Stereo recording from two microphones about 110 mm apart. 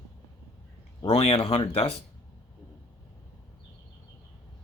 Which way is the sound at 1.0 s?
65° left (ahead or behind).